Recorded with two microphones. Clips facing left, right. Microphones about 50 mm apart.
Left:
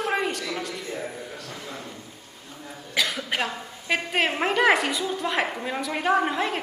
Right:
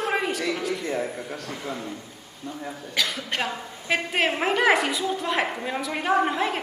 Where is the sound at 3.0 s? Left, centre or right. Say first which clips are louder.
Left 1 dB; centre.